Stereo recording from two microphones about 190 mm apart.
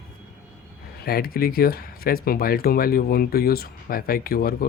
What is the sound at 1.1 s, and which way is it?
Speech, 50° left (ahead or behind).